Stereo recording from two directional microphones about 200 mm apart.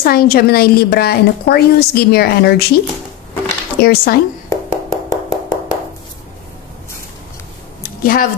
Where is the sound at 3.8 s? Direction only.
50° left (ahead or behind).